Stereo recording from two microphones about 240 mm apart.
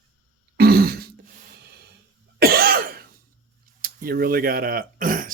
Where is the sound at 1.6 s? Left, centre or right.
Right.